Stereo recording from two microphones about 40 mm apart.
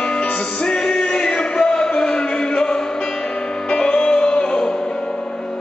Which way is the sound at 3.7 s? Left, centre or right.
Left.